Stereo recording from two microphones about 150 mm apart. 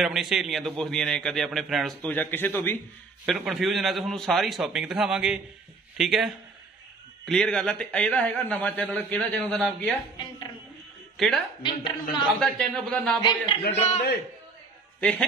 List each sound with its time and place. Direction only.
0.0 s a man's voice: centre (ahead or behind)
2.0 s a man's voice: 10° left (ahead or behind)
3.3 s a man's voice: centre (ahead or behind)
11.2 s a man's voice: centre (ahead or behind)
11.6 s a woman's voice: 30° left (ahead or behind)
12.4 s a man's voice: 5° left (ahead or behind)
13.7 s a man's voice: 45° left (ahead or behind)
15.0 s speech: 10° left (ahead or behind)